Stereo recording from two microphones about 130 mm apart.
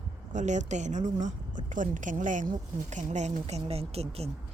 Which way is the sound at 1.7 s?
80° right.